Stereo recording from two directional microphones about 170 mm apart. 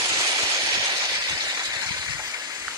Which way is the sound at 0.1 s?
20° right (ahead or behind).